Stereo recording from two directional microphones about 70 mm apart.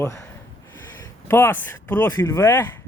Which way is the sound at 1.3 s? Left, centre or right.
Left.